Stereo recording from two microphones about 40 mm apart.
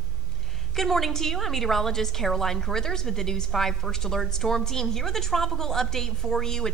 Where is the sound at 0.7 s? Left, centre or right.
Centre.